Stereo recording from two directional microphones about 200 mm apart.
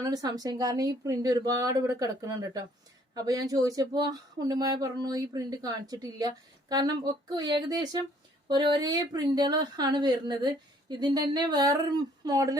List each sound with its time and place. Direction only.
0.0 s speech: 20° right (ahead or behind)